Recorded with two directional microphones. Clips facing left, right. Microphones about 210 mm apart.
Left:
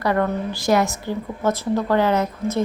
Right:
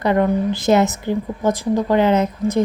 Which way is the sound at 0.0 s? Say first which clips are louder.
Right 4 dB; 20° right (ahead or behind).